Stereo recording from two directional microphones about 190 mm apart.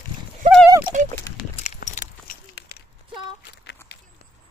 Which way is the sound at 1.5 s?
40° left (ahead or behind).